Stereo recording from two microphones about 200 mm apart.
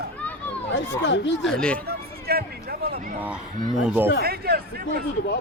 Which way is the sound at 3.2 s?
5° right (ahead or behind).